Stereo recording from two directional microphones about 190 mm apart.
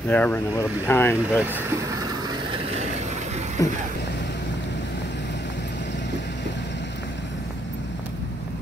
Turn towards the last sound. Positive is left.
turn(degrees=70)  # may be behind; listen again after turning